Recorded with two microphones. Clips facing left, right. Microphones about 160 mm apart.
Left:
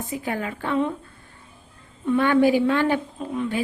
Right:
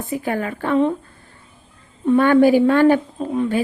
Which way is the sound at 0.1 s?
55° right (ahead or behind).